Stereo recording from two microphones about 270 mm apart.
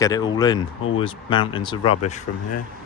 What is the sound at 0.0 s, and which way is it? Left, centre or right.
Speech, centre.